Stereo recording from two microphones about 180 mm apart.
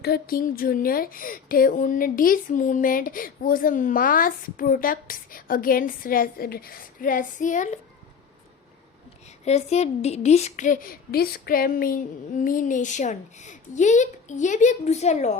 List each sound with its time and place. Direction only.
0.0 s speech: 55° left (ahead or behind)
9.4 s speech: 40° left (ahead or behind)